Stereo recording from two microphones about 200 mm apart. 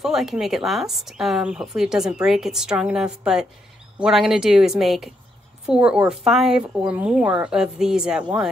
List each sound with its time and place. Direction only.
0.0 s speech: centre (ahead or behind)